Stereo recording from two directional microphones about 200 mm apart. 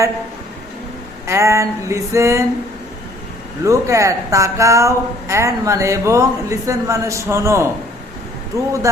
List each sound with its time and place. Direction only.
1.3 s speech: 15° right (ahead or behind)
3.6 s speech: 15° right (ahead or behind)